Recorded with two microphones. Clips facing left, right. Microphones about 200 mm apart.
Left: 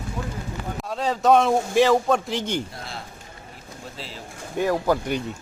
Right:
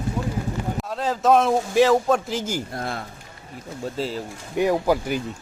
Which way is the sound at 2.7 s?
55° right (ahead or behind).